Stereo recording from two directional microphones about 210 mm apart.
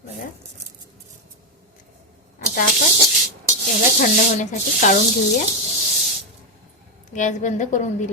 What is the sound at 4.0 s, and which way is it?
Speech, 40° left (ahead or behind).